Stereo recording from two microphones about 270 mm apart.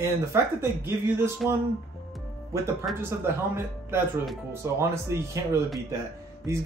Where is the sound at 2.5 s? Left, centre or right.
Centre.